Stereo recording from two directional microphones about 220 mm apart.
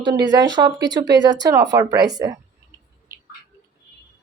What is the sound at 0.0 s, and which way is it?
Speech, 20° right (ahead or behind).